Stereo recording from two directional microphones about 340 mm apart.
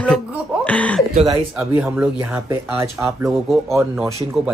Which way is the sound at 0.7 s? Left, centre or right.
Centre.